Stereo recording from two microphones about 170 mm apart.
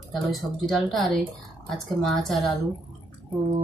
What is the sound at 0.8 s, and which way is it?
Speech, centre (ahead or behind).